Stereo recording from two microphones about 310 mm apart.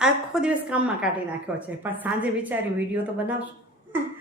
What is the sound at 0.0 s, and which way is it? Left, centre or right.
A woman's voice, centre.